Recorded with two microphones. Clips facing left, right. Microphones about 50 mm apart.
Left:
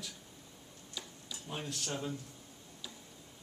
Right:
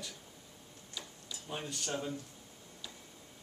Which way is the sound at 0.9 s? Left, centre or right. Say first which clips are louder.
Even; centre.